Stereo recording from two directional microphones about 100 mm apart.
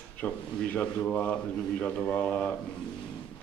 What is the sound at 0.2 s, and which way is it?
A man's voice, 15° left (ahead or behind).